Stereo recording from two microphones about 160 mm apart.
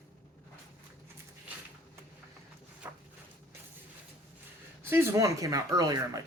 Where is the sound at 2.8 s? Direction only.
15° right (ahead or behind).